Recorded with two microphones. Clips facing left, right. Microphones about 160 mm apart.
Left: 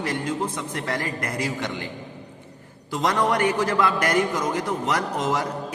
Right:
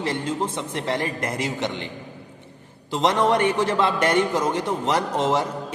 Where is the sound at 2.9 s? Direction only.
25° right (ahead or behind).